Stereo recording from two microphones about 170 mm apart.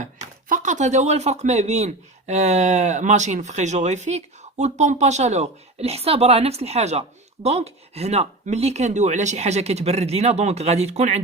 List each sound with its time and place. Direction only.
0.4 s speech: 50° right (ahead or behind)